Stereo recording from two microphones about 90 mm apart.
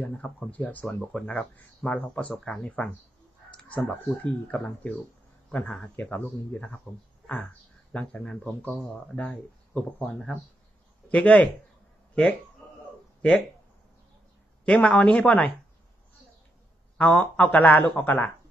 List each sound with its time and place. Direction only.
0.0 s speech: 15° left (ahead or behind)
7.9 s speech: 10° left (ahead or behind)
14.6 s speech: 15° left (ahead or behind)
17.0 s speech: 15° left (ahead or behind)